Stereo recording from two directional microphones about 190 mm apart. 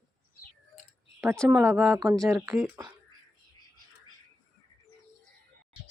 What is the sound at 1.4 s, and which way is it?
Speech, 15° right (ahead or behind).